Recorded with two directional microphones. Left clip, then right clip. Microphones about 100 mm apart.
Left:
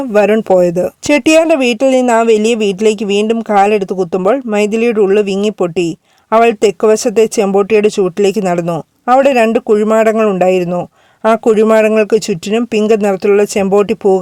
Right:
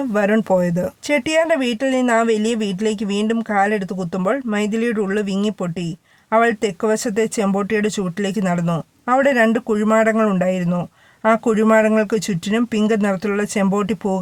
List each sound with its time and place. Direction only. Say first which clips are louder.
0.1 s speech: left 9 dB; 50° left (ahead or behind)
1.0 s speech: left 8 dB; 65° left (ahead or behind)
4.5 s speech: left 9 dB; 60° left (ahead or behind)